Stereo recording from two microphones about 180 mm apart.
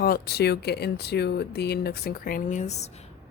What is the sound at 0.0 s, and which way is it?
A woman's voice, 60° left (ahead or behind).